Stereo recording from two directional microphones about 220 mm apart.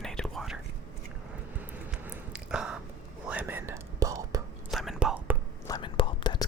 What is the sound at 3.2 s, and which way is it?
Whispering, 10° right (ahead or behind).